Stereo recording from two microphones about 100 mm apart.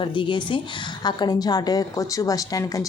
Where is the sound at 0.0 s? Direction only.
55° left (ahead or behind).